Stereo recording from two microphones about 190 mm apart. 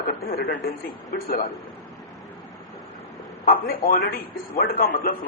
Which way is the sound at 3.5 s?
50° left (ahead or behind).